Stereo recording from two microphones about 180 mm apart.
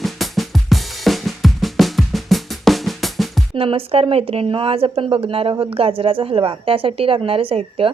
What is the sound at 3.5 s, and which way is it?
A woman's voice, 30° right (ahead or behind).